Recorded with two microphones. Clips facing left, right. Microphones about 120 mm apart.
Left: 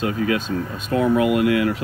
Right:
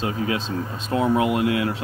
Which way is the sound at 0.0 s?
25° right (ahead or behind).